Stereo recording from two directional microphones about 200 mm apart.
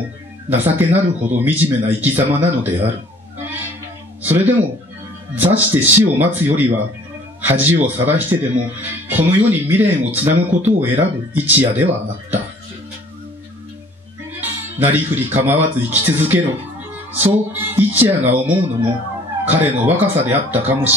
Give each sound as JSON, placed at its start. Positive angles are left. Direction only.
{"t": 0.5, "sound": "speech", "side_deg": -10}
{"t": 4.2, "sound": "speech", "side_deg": -10}
{"t": 14.4, "sound": "speech", "side_deg": -10}